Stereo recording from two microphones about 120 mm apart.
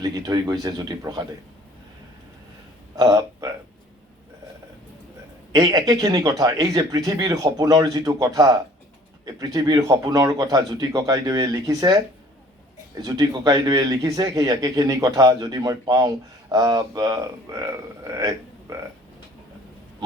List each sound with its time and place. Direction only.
0.0 s speech: 35° right (ahead or behind)
2.9 s speech: 30° right (ahead or behind)
5.5 s speech: 30° right (ahead or behind)